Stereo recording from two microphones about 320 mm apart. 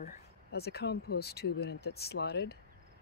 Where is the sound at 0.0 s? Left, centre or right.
Left.